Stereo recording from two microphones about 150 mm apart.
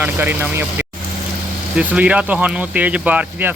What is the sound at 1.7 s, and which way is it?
Speech, 5° right (ahead or behind).